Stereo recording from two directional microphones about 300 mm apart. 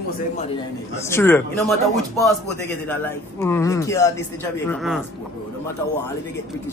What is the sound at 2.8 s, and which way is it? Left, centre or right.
Speech, centre.